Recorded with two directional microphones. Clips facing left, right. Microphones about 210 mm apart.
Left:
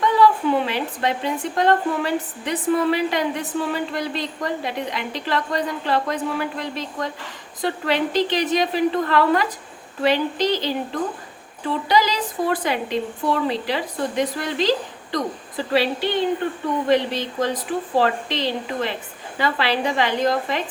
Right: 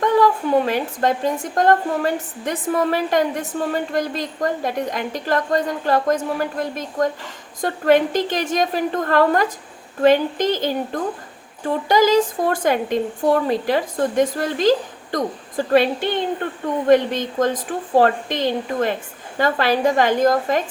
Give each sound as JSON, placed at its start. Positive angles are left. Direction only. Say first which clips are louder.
{"t": 0.0, "sound": "speech", "louder": "right 1 dB", "side_deg": -45}